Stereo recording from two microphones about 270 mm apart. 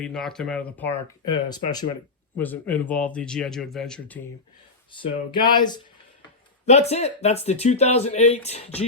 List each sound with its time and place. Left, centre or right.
0.0 s speech: centre
4.9 s speech: centre